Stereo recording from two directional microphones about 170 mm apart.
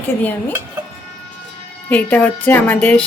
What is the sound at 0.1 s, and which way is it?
Speech, 10° left (ahead or behind).